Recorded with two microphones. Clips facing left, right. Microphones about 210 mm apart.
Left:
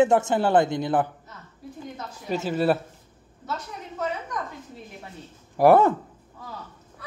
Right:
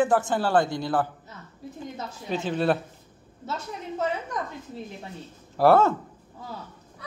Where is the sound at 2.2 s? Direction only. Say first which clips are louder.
Left 2 dB; 5° left (ahead or behind).